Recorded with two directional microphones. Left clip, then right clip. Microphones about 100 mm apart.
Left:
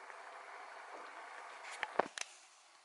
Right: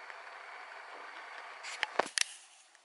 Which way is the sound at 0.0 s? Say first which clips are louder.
Right 4 dB; 35° left (ahead or behind).